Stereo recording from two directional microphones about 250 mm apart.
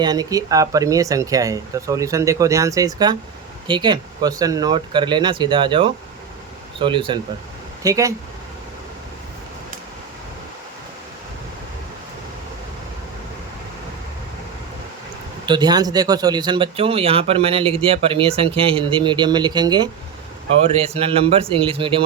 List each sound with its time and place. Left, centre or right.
0.0 s speech: centre
15.4 s speech: centre